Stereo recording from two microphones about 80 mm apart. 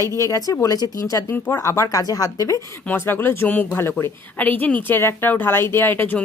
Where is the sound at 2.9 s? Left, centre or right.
Left.